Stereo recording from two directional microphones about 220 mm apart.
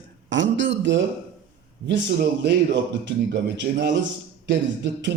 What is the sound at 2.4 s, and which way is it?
Speech, 55° right (ahead or behind).